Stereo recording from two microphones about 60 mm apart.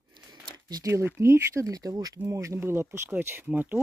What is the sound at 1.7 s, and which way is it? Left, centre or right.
Speech, right.